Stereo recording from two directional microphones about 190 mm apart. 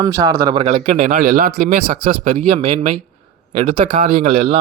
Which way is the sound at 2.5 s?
30° right (ahead or behind).